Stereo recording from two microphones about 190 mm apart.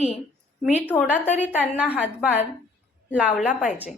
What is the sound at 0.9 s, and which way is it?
Speech, 10° left (ahead or behind).